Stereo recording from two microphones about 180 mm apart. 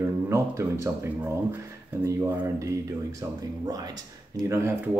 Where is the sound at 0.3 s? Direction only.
15° right (ahead or behind).